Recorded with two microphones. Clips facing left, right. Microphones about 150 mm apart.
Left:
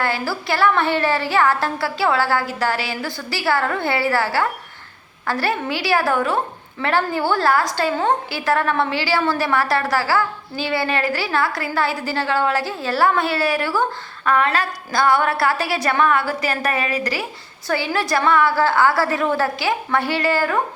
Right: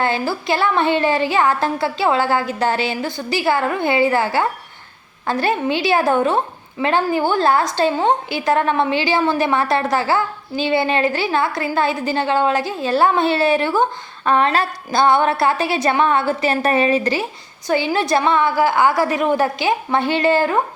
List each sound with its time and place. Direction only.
0.0 s a woman's voice: 20° right (ahead or behind)